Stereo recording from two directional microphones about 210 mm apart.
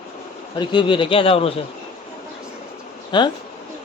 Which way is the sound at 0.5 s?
20° left (ahead or behind).